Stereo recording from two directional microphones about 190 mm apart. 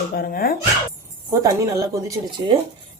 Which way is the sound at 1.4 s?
20° right (ahead or behind).